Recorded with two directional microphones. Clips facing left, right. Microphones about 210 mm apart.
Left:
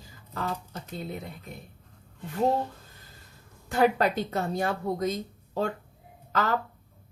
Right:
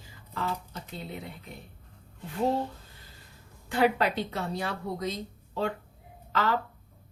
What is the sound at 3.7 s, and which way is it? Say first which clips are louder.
A woman's voice: left 2 dB; 45° left (ahead or behind).